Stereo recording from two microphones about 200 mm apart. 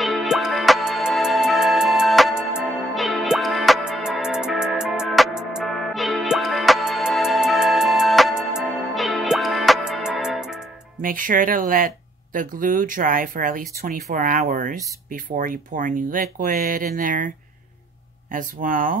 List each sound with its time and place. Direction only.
0.0 s music: centre (ahead or behind)
11.0 s speech: 40° right (ahead or behind)
18.3 s speech: 40° right (ahead or behind)